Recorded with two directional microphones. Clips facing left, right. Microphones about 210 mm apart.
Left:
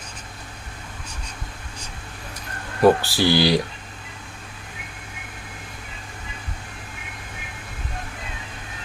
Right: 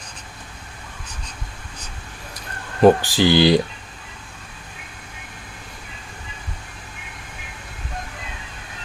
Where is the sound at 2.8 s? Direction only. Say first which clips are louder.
Right 3 dB; 20° right (ahead or behind).